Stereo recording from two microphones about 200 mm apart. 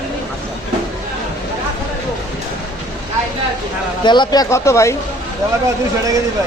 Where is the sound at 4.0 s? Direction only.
20° left (ahead or behind).